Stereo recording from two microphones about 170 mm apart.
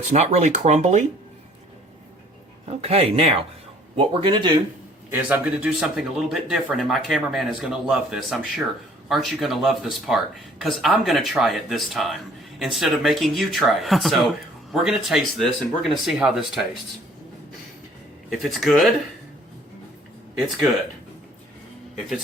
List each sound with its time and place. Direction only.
0.1 s speech: 40° right (ahead or behind)
2.6 s speech: 35° right (ahead or behind)
5.1 s speech: 10° right (ahead or behind)
18.3 s speech: centre (ahead or behind)